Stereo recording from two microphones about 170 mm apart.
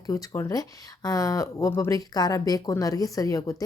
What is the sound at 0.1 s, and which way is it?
Speech, 20° left (ahead or behind).